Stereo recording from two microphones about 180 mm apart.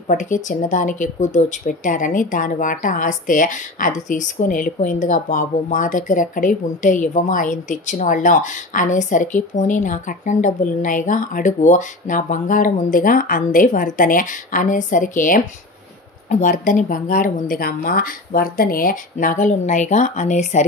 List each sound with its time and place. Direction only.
0.1 s speech: 45° left (ahead or behind)